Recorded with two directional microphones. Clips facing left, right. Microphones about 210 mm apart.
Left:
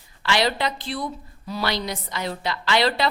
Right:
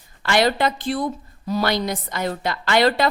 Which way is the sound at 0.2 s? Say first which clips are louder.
Right 4 dB; 45° right (ahead or behind).